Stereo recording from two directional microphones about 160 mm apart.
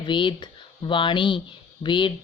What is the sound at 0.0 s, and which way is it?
Speech, 30° left (ahead or behind).